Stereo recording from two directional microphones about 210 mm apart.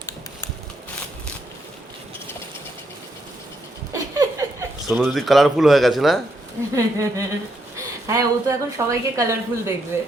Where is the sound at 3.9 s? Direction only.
15° right (ahead or behind).